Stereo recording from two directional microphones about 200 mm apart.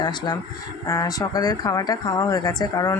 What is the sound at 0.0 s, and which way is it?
Speech, 20° left (ahead or behind).